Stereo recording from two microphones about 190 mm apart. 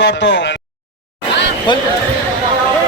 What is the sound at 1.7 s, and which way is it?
Speech, 25° left (ahead or behind).